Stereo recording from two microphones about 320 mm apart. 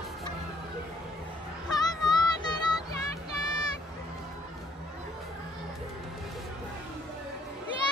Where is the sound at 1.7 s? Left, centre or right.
Centre.